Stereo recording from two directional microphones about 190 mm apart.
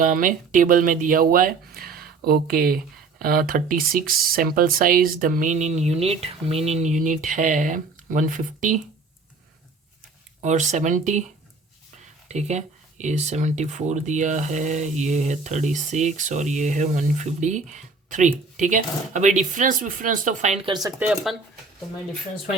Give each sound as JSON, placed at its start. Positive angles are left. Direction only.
{"t": 0.0, "sound": "speech", "side_deg": -45}
{"t": 10.4, "sound": "speech", "side_deg": -40}
{"t": 20.7, "sound": "speech", "side_deg": -20}
{"t": 21.0, "sound": "speech", "side_deg": -5}